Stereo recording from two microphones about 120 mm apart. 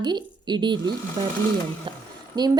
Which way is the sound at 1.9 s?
45° right (ahead or behind).